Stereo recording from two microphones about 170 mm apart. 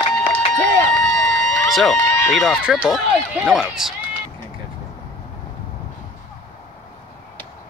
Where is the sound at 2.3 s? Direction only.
Centre (ahead or behind).